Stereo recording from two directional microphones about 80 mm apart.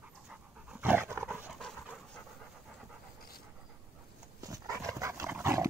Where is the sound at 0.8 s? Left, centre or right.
Right.